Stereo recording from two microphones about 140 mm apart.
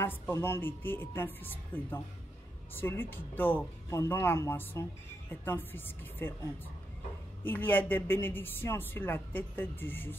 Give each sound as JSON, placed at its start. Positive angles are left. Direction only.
{"t": 0.0, "sound": "speech", "side_deg": 15}
{"t": 7.4, "sound": "speech", "side_deg": 15}